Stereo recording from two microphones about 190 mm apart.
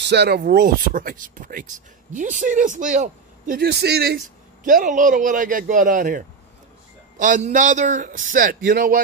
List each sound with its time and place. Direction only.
0.0 s speech: 60° right (ahead or behind)
4.6 s a man's voice: 45° right (ahead or behind)